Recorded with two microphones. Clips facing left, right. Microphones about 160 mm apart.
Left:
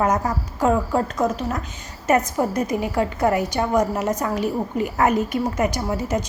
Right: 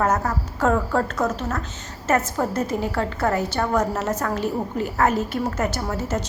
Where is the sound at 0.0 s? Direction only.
15° left (ahead or behind).